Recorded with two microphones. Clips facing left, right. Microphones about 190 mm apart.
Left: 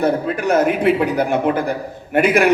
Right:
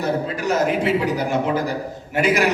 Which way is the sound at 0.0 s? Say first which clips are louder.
Left 4 dB; 55° left (ahead or behind).